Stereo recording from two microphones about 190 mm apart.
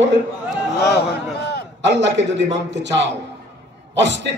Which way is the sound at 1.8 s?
70° right (ahead or behind).